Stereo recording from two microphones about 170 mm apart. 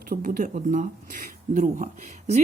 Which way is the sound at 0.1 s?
55° right (ahead or behind).